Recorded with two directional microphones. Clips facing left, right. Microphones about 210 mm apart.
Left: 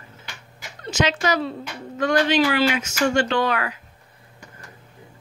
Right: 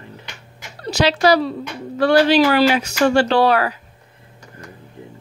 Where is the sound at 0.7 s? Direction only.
35° right (ahead or behind).